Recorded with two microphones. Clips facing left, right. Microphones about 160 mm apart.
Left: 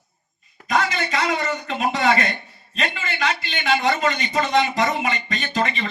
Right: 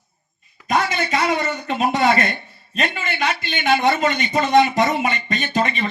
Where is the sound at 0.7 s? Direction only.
45° right (ahead or behind).